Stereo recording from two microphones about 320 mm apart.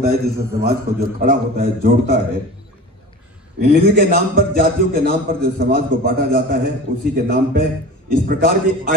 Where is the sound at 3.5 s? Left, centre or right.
Right.